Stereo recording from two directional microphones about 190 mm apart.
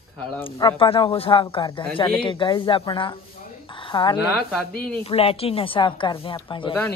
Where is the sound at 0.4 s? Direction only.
25° left (ahead or behind).